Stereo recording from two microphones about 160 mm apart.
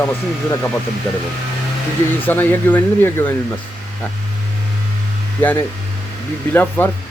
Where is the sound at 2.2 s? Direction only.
10° left (ahead or behind).